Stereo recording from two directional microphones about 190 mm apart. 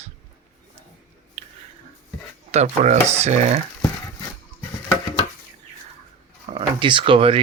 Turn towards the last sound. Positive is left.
turn(degrees=-30)  # may be behind; listen again after turning